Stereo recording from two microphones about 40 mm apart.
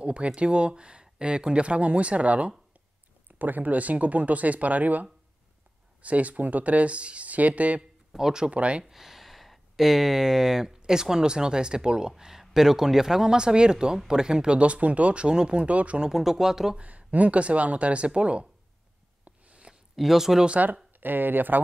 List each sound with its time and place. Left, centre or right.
0.0 s a sound: right
0.4 s speech: right
3.3 s speech: right
6.0 s speech: right
8.1 s speech: centre
8.5 s speech: right
8.9 s speech: centre; by 15.2 s right
15.2 s speech: right
16.1 s speech: centre
16.7 s speech: right
19.2 s a sound: right
20.0 s speech: centre
20.5 s speech: right
21.0 s speech: right